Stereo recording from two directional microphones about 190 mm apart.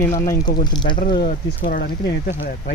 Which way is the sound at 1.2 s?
45° left (ahead or behind).